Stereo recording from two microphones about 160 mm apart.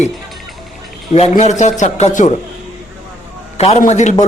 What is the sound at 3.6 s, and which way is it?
Speech, 45° left (ahead or behind).